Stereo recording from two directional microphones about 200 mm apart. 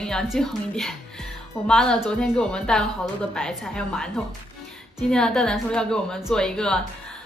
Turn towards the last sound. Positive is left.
turn(degrees=5)  # may be behind; listen again after turning